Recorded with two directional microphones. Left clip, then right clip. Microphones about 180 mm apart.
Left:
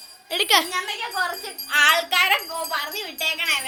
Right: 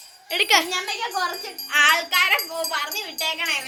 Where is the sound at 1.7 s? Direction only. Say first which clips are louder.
Even; 65° left (ahead or behind).